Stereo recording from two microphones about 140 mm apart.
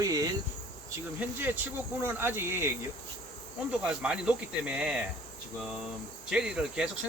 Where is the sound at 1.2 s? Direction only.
10° right (ahead or behind).